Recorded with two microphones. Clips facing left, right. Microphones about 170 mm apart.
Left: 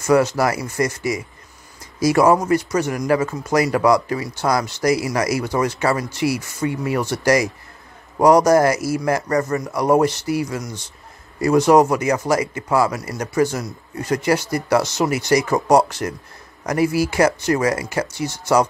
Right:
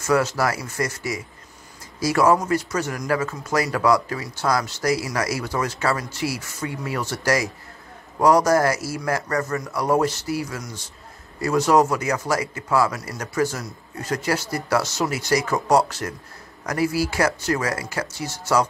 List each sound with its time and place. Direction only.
0.0 s a man's voice: 15° left (ahead or behind)